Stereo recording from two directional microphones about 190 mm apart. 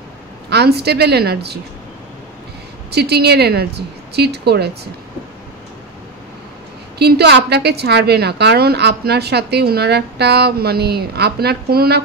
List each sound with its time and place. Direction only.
0.5 s a woman's voice: 60° right (ahead or behind)
2.9 s a woman's voice: 60° right (ahead or behind)
7.0 s a woman's voice: 60° right (ahead or behind)